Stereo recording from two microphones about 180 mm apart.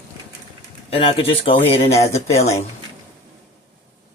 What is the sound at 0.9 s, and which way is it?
Speech, 30° left (ahead or behind).